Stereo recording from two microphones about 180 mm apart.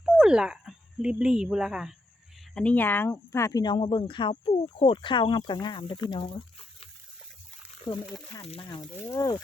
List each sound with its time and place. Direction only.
0.2 s speech: 5° right (ahead or behind)
2.6 s speech: 10° left (ahead or behind); by 6.8 s 30° left (ahead or behind)
8.4 s speech: 30° left (ahead or behind)